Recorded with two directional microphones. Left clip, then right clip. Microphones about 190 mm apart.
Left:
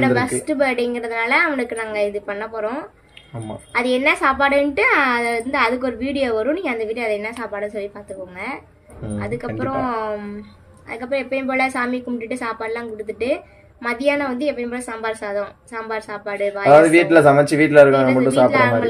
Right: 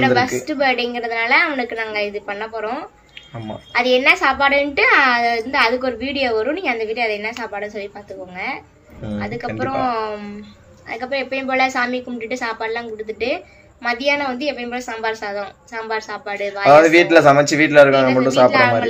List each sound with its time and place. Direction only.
0.0 s a woman's voice: 20° left (ahead or behind)
9.2 s a woman's voice: 20° left (ahead or behind)
9.5 s a man's voice: centre (ahead or behind)
9.8 s a woman's voice: 20° left (ahead or behind)
16.7 s a man's voice: centre (ahead or behind)